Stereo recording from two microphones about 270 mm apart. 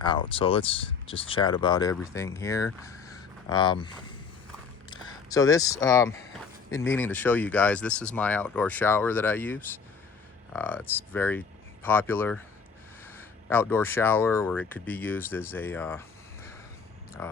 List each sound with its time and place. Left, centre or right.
0.0 s speech: centre
2.8 s a sound: centre
4.9 s speech: centre